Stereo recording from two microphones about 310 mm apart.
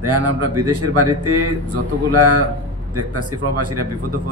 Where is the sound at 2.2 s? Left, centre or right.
Right.